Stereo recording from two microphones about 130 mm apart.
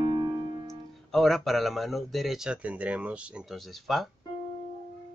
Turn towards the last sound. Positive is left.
turn(degrees=0)  # may be behind; listen again after turning